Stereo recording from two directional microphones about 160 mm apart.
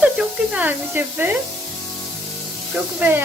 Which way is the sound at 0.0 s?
5° right (ahead or behind).